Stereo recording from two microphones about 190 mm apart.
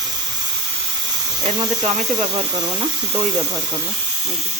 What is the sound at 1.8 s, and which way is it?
Speech, 35° right (ahead or behind).